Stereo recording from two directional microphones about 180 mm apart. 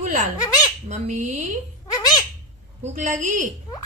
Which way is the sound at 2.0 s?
20° left (ahead or behind).